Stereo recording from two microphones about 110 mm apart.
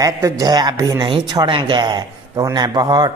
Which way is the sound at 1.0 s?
45° right (ahead or behind).